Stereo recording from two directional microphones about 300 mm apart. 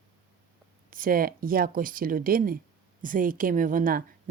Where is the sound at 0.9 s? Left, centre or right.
Right.